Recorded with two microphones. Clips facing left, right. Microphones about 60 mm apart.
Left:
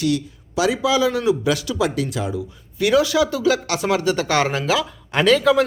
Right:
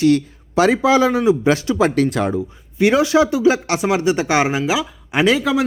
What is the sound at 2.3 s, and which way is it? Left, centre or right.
Speech, right.